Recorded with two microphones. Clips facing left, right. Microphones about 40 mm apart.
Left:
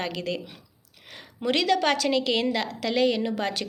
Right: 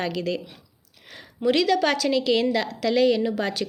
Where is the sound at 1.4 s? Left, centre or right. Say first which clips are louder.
Right 2 dB; left; by 3.3 s centre.